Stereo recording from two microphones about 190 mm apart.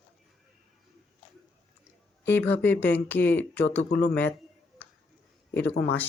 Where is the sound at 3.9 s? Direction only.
55° left (ahead or behind).